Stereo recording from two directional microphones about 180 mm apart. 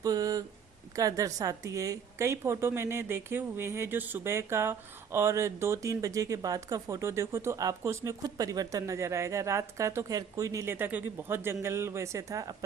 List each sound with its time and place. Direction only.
0.0 s a woman's voice: 20° right (ahead or behind)